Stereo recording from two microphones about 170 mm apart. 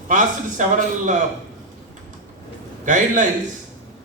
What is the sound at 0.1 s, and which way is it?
Speech, 50° right (ahead or behind).